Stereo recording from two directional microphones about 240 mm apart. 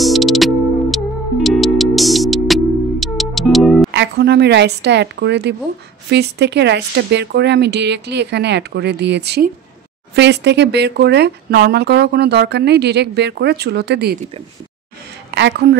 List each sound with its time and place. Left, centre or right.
0.0 s music: centre
3.9 s speech: right
15.3 s speech: right